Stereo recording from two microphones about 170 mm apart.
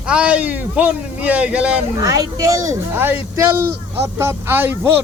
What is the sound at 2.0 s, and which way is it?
Speech, 20° right (ahead or behind).